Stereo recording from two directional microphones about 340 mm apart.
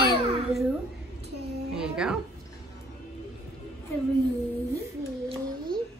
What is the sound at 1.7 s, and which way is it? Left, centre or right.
Music, centre.